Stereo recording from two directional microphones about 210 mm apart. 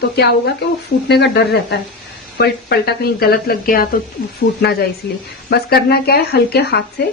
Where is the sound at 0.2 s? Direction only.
50° left (ahead or behind).